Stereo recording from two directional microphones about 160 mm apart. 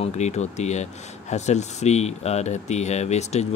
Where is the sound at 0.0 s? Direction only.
45° left (ahead or behind).